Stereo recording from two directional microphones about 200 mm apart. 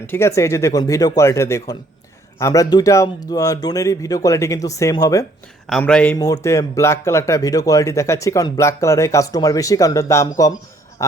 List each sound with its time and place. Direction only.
0.0 s speech: 10° left (ahead or behind)
5.6 s a man's voice: 5° left (ahead or behind)